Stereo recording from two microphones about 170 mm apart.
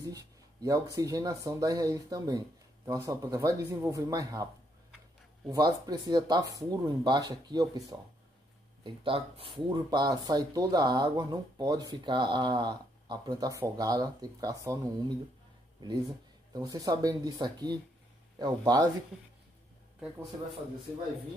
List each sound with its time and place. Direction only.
0.0 s speech: 20° right (ahead or behind)
5.5 s speech: 20° right (ahead or behind)
8.8 s speech: 30° right (ahead or behind)
16.5 s speech: 20° right (ahead or behind)